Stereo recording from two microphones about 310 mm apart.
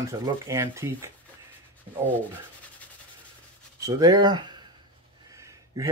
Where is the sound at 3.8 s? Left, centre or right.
Centre.